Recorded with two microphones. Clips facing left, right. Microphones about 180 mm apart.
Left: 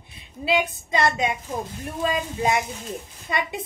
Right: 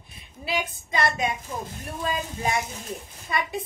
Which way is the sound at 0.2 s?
25° left (ahead or behind).